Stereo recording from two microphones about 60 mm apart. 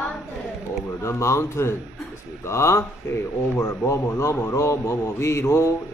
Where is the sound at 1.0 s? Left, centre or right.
Left.